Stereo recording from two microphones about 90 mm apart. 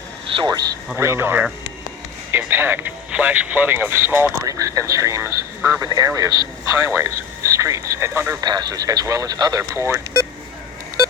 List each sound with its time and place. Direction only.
0.3 s a sound: 90° right
0.9 s speech: 25° right (ahead or behind)
2.5 s speech: 25° right (ahead or behind)
4.4 s speech: 40° right (ahead or behind)
8.4 s speech: 45° right (ahead or behind)
9.7 s speech: 30° right (ahead or behind)